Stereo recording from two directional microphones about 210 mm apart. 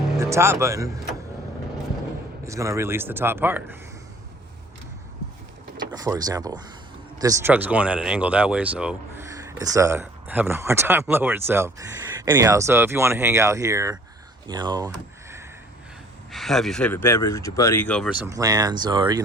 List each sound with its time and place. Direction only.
0.2 s speech: 15° right (ahead or behind)
2.4 s speech: 15° right (ahead or behind)
5.7 s speech: 20° right (ahead or behind)
16.3 s speech: centre (ahead or behind)
18.2 s speech: 15° right (ahead or behind)